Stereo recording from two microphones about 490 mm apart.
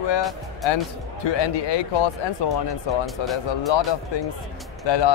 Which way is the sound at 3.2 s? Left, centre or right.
Left.